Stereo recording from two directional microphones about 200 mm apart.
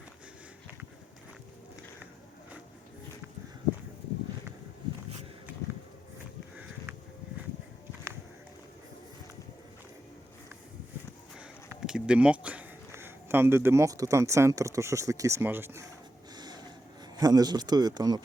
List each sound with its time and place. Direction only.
11.3 s speech: 5° right (ahead or behind)
16.3 s a sound: 20° right (ahead or behind)
17.2 s speech: 20° right (ahead or behind)